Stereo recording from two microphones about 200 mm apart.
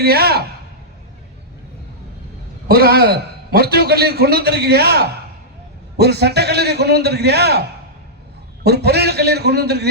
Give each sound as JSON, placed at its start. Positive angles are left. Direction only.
{"t": 0.0, "sound": "a man's voice", "side_deg": -50}
{"t": 2.6, "sound": "a man's voice", "side_deg": -50}
{"t": 8.6, "sound": "a man's voice", "side_deg": -55}